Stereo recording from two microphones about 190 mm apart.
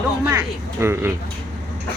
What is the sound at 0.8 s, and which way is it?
Speech, 15° right (ahead or behind).